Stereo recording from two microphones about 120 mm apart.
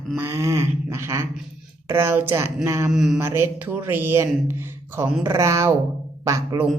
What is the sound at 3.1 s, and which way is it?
A woman's voice, 20° right (ahead or behind).